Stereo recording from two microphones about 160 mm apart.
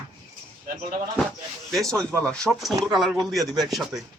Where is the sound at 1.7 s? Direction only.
5° left (ahead or behind).